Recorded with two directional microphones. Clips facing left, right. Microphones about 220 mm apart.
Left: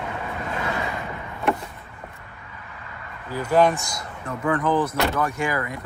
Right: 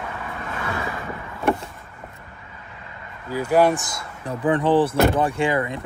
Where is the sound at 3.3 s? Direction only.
10° right (ahead or behind).